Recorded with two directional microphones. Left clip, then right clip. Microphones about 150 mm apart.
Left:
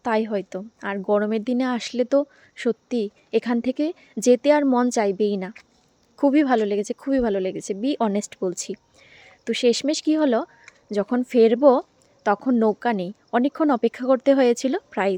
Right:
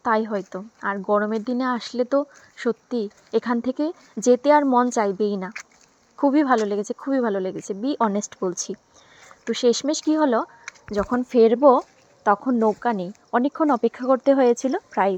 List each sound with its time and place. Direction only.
0.0 s speech: 15° left (ahead or behind)
9.8 s speech: 10° left (ahead or behind)